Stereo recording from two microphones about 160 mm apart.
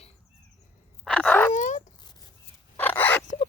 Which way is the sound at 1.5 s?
50° left (ahead or behind).